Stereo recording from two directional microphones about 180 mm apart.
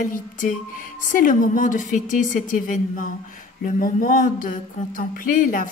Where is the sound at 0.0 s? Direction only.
50° left (ahead or behind).